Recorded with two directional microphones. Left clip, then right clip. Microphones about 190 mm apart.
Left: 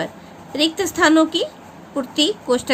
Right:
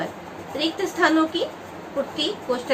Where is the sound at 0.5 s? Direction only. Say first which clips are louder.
Left 5 dB; 65° left (ahead or behind).